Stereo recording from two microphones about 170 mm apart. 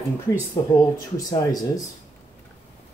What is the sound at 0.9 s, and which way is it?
Speech, 20° left (ahead or behind).